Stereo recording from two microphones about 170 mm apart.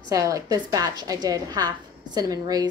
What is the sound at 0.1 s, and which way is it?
A woman's voice, 20° right (ahead or behind).